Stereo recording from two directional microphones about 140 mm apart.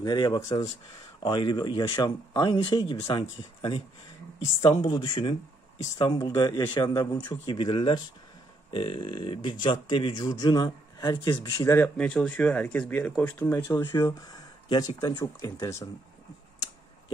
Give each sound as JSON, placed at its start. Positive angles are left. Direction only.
{"t": 0.0, "sound": "speech", "side_deg": 30}